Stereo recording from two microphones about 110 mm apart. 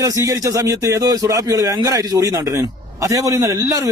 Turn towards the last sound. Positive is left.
turn(degrees=-30)  # may be behind; listen again after turning